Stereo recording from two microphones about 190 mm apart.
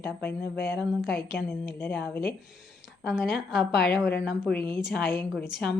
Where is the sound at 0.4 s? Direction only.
60° left (ahead or behind).